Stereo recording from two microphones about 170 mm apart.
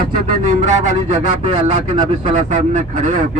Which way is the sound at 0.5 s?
45° right (ahead or behind).